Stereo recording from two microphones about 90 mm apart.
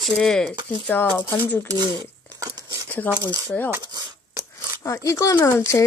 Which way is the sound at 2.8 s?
15° left (ahead or behind).